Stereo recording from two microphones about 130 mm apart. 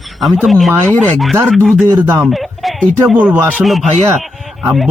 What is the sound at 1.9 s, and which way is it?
Speech, 25° right (ahead or behind).